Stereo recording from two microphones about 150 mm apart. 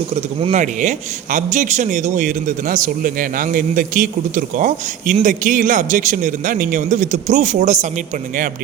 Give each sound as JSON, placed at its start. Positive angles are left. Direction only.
{"t": 0.5, "sound": "a man's voice", "side_deg": -55}